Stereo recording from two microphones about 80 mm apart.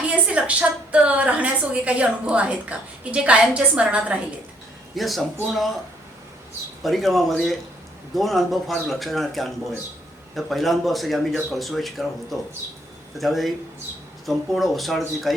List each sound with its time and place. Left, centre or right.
0.1 s a woman's voice: centre
4.9 s speech: centre
6.8 s speech: centre